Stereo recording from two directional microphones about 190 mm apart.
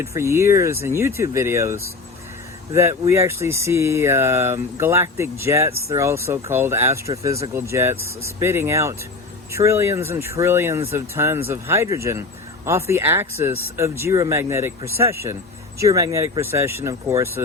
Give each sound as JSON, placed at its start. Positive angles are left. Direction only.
{"t": 0.0, "sound": "speech", "side_deg": -15}